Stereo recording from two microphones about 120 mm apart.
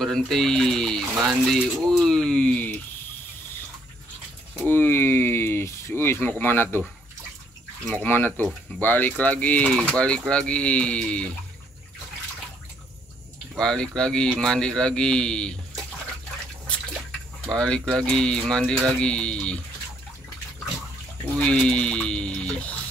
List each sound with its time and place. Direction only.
0.0 s speech: centre (ahead or behind)
4.6 s speech: 15° left (ahead or behind)
7.9 s speech: 15° left (ahead or behind)
13.6 s speech: 5° left (ahead or behind)
17.4 s speech: 5° left (ahead or behind)
21.4 s speech: 10° left (ahead or behind)